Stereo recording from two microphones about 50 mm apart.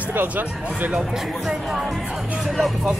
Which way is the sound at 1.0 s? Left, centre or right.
Centre.